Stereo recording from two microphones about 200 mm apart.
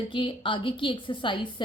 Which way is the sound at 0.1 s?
25° left (ahead or behind).